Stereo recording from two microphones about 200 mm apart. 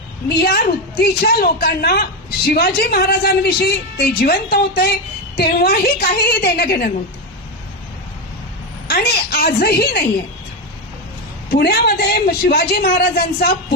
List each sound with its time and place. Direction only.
0.3 s a woman's voice: 50° left (ahead or behind)
8.9 s a woman's voice: 50° left (ahead or behind)
11.5 s a woman's voice: 50° left (ahead or behind)